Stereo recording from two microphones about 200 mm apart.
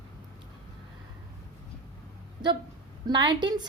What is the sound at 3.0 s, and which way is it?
Speech, 20° right (ahead or behind).